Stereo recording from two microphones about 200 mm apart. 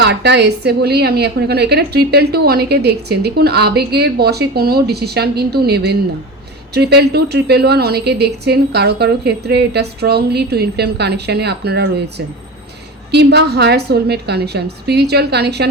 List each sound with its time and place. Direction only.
0.0 s a woman's voice: 55° right (ahead or behind)